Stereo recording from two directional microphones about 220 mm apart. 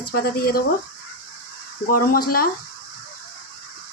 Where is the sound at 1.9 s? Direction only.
40° left (ahead or behind).